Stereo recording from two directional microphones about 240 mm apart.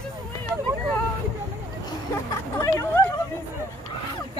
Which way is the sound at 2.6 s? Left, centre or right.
Centre.